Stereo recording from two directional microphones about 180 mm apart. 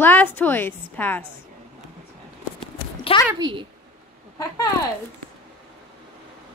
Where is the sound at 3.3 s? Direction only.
25° right (ahead or behind).